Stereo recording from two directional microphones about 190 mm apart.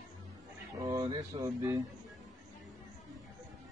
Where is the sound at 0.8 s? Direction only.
20° right (ahead or behind).